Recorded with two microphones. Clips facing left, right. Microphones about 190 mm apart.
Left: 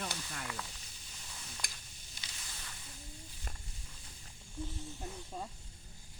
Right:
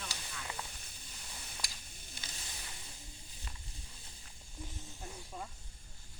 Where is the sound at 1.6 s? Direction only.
55° left (ahead or behind).